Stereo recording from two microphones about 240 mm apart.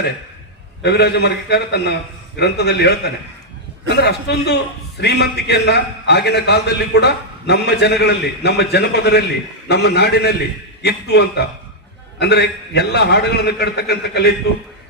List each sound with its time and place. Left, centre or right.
0.8 s a man's voice: left